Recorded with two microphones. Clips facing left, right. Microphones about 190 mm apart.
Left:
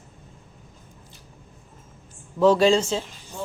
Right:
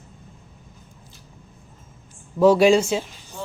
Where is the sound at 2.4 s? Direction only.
10° right (ahead or behind).